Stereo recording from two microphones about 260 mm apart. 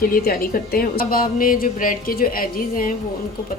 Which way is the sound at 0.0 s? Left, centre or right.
Left.